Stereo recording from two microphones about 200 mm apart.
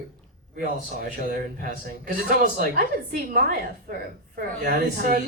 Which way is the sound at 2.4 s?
45° right (ahead or behind).